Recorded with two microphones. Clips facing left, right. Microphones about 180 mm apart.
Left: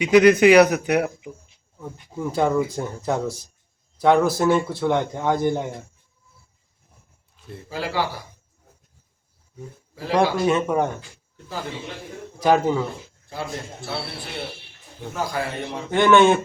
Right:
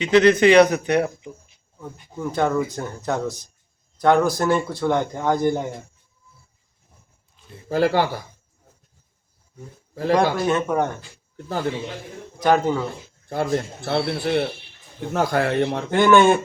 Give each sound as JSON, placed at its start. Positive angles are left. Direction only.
{"t": 0.0, "sound": "a man's voice", "side_deg": 10}
{"t": 7.7, "sound": "a man's voice", "side_deg": -55}
{"t": 10.1, "sound": "a man's voice", "side_deg": 5}
{"t": 12.4, "sound": "a man's voice", "side_deg": 5}
{"t": 13.2, "sound": "a man's voice", "side_deg": -50}
{"t": 15.9, "sound": "a man's voice", "side_deg": 0}